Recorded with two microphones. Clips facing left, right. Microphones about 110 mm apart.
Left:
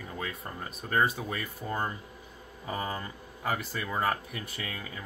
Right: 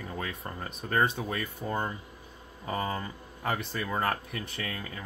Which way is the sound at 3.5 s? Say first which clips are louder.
Right 1 dB; 5° left (ahead or behind).